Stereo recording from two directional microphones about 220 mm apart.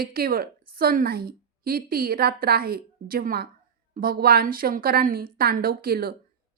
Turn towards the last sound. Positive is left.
turn(degrees=-45)  # may be behind; listen again after turning